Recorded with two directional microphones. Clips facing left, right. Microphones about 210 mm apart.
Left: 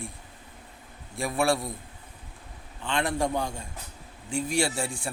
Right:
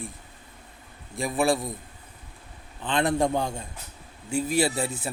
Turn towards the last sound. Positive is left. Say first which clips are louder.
# right 3 dB
turn(degrees=-5)  # may be behind; listen again after turning